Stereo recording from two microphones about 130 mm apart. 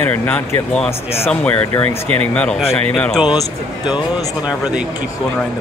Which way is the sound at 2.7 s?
10° left (ahead or behind).